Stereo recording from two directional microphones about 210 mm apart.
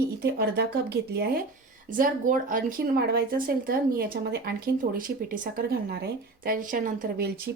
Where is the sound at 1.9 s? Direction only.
40° right (ahead or behind).